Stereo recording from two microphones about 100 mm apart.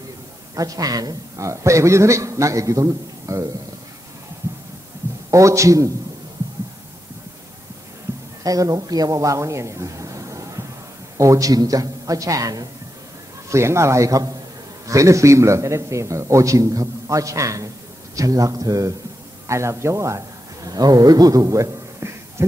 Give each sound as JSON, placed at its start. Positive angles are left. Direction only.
{"t": 0.6, "sound": "a man's voice", "side_deg": -40}
{"t": 5.3, "sound": "a man's voice", "side_deg": -30}
{"t": 8.1, "sound": "a sound", "side_deg": -20}
{"t": 8.5, "sound": "a man's voice", "side_deg": -35}